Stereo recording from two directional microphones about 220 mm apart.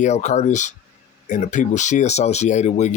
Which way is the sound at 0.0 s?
30° left (ahead or behind).